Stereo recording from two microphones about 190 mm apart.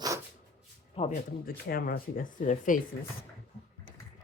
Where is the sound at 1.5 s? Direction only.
50° left (ahead or behind).